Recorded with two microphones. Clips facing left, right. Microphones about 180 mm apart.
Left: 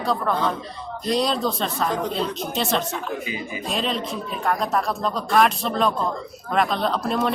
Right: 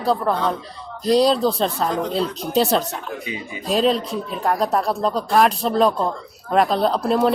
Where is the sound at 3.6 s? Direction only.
35° right (ahead or behind).